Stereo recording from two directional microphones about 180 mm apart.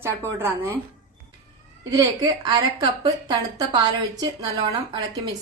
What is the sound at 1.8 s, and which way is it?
A woman's voice, 20° right (ahead or behind).